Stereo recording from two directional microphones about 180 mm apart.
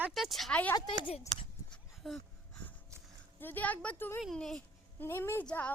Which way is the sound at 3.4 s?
10° left (ahead or behind).